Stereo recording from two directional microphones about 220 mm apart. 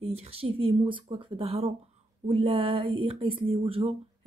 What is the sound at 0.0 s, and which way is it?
Speech, 30° right (ahead or behind).